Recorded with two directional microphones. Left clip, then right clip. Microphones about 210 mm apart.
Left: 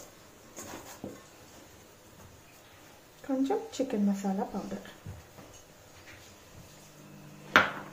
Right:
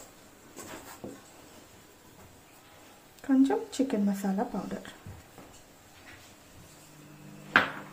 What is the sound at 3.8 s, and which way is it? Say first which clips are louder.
Speech: right 2 dB; 45° right (ahead or behind).